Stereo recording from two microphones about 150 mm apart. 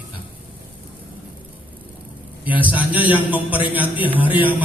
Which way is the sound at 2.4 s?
10° right (ahead or behind).